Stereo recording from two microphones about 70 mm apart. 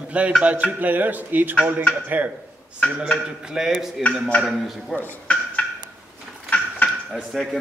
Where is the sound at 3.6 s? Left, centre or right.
Centre.